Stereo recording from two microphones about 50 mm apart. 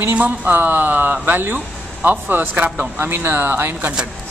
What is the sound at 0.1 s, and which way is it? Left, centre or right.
Speech, right.